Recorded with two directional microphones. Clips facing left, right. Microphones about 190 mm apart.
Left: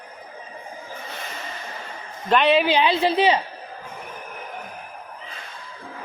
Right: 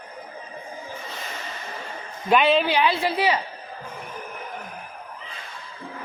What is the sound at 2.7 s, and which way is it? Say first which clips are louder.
Speech: left 3 dB; 20° left (ahead or behind).